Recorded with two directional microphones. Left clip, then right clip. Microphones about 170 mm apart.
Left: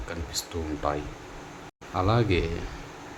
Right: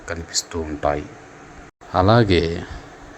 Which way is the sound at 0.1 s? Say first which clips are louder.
Right 8 dB; 30° right (ahead or behind).